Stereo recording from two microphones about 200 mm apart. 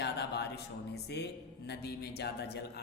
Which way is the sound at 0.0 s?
55° left (ahead or behind).